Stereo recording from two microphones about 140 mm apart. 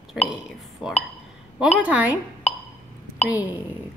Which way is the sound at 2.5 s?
45° left (ahead or behind).